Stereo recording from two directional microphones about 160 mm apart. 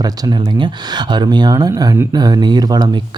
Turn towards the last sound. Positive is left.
turn(degrees=-25)  # may be behind; listen again after turning